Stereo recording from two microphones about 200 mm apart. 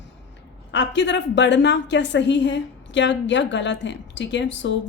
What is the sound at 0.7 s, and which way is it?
A woman's voice, 65° left (ahead or behind).